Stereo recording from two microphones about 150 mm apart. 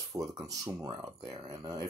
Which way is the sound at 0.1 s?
25° right (ahead or behind).